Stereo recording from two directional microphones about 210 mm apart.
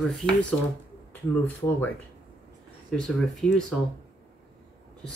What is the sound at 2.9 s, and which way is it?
Speech, 5° left (ahead or behind).